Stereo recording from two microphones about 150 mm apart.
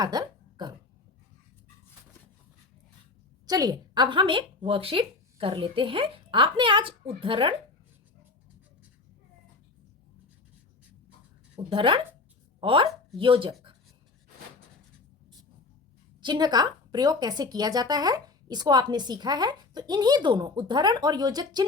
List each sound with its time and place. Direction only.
0.0 s a sound: 25° right (ahead or behind)
3.4 s a woman's voice: 25° right (ahead or behind)
11.7 s speech: 35° right (ahead or behind)
16.2 s speech: 30° right (ahead or behind)